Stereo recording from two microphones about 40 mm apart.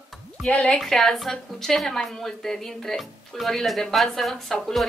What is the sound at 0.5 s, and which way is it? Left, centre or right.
Speech, left.